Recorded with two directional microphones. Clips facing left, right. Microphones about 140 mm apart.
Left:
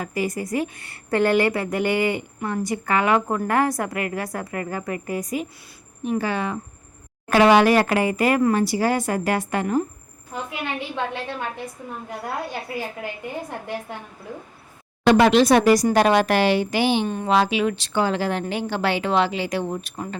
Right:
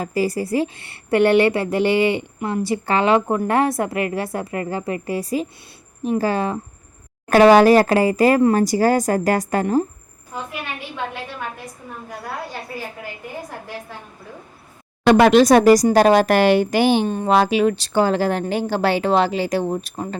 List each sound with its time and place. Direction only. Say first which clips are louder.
0.0 s a woman's voice: right 4 dB; 35° right (ahead or behind)
8.5 s a woman's voice: right 4 dB; 40° right (ahead or behind)
15.1 s a woman's voice: right 4 dB; 50° right (ahead or behind)
17.1 s a woman's voice: right 4 dB; 30° right (ahead or behind)
17.3 s a woman's voice: right 4 dB; 45° right (ahead or behind)